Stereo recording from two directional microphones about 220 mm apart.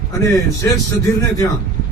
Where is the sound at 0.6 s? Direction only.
15° left (ahead or behind).